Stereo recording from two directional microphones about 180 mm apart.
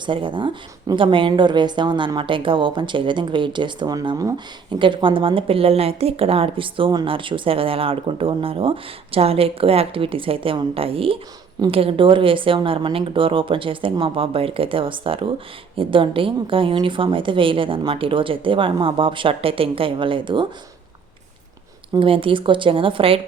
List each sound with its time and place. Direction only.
0.0 s a woman's voice: 25° right (ahead or behind)
21.9 s a woman's voice: 30° right (ahead or behind)